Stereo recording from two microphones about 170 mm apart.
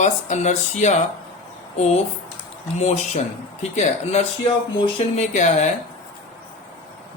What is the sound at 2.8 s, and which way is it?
Speech, 40° left (ahead or behind).